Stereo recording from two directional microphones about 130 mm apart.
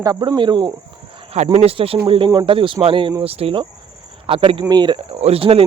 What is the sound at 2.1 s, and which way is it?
Speech, 35° right (ahead or behind).